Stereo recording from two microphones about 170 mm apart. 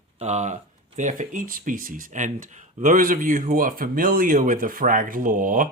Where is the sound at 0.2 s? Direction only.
40° right (ahead or behind).